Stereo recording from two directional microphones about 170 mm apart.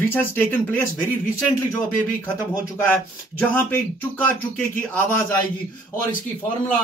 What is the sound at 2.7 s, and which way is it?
Speech, 10° left (ahead or behind).